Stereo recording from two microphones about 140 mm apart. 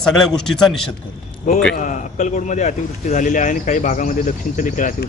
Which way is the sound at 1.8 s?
60° left (ahead or behind).